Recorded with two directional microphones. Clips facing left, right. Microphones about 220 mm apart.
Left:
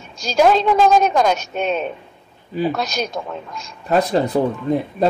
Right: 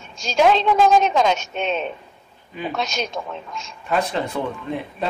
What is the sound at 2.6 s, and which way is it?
Speech, 35° left (ahead or behind).